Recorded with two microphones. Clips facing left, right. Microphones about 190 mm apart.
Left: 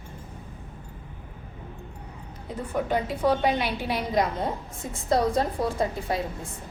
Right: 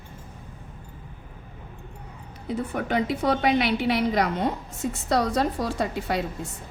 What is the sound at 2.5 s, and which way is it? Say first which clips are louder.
A woman's voice: right 1 dB; 75° right (ahead or behind).